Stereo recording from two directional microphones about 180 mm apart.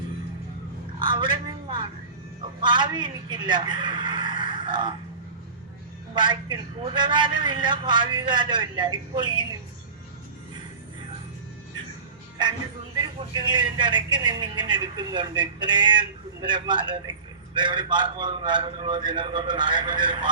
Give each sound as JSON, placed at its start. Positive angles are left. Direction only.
{"t": 0.9, "sound": "a sound", "side_deg": -25}
{"t": 2.6, "sound": "a man's voice", "side_deg": -25}
{"t": 6.1, "sound": "a man's voice", "side_deg": -25}
{"t": 13.0, "sound": "a man's voice", "side_deg": -25}